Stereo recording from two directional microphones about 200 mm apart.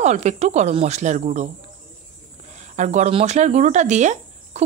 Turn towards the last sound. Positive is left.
turn(degrees=-35)  # may be behind; listen again after turning